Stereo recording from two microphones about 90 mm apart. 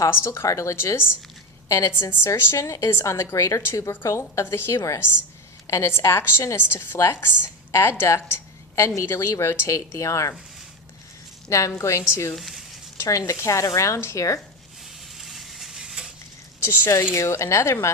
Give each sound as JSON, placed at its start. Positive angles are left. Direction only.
{"t": 0.0, "sound": "a woman's voice", "side_deg": 30}
{"t": 11.4, "sound": "a woman's voice", "side_deg": 35}
{"t": 12.3, "sound": "a sound", "side_deg": 0}
{"t": 13.0, "sound": "a woman's voice", "side_deg": 35}
{"t": 15.2, "sound": "stir", "side_deg": 0}
{"t": 16.8, "sound": "a woman's voice", "side_deg": 35}